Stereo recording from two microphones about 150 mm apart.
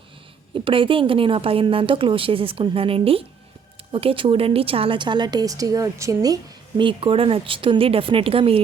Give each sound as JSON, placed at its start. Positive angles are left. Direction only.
{"t": 0.5, "sound": "a woman's voice", "side_deg": -35}